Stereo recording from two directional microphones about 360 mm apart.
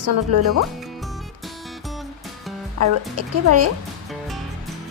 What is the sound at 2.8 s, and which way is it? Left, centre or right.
Speech, right.